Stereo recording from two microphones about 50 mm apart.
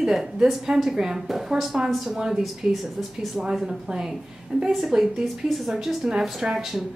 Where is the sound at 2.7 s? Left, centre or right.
Centre.